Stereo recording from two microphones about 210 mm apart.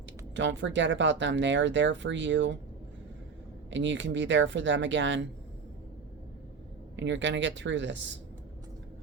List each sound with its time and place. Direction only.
0.3 s speech: 60° right (ahead or behind)
3.7 s speech: 60° right (ahead or behind)
6.9 s speech: 60° right (ahead or behind)